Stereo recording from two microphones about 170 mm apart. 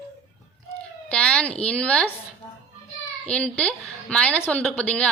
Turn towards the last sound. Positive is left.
turn(degrees=5)  # may be behind; listen again after turning